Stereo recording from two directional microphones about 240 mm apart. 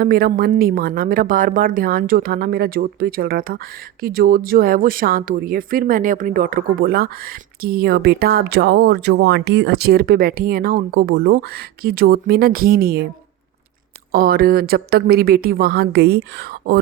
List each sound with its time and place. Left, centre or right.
0.0 s a woman's voice: right
14.1 s a woman's voice: right